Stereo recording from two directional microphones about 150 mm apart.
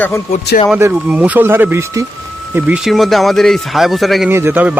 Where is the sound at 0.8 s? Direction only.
15° right (ahead or behind).